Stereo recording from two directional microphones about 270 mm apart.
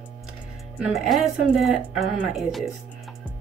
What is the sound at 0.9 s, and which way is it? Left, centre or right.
Speech, centre.